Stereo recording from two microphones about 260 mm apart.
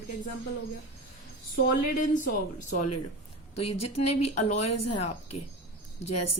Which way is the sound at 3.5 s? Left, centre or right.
Left.